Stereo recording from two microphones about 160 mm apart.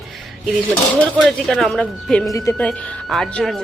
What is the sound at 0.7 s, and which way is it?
Speech, 10° left (ahead or behind).